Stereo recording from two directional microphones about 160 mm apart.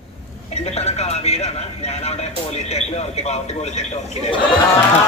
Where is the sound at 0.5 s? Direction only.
40° left (ahead or behind).